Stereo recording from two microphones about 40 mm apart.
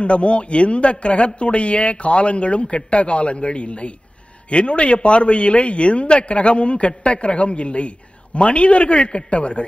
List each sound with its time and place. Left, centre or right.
0.0 s a man's voice: left